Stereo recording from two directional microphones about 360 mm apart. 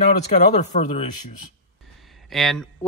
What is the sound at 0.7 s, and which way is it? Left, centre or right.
Speech, centre.